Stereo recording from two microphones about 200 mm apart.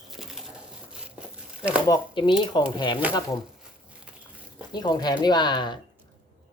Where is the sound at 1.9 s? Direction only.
25° left (ahead or behind).